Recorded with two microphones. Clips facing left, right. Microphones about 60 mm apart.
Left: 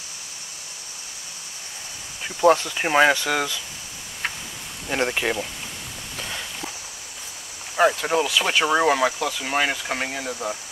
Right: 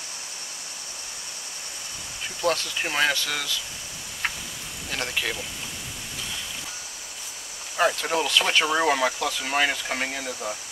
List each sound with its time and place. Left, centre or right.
2.2 s speech: left
4.8 s speech: left
7.7 s speech: centre